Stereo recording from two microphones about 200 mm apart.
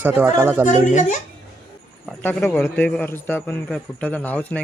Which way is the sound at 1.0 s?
35° left (ahead or behind).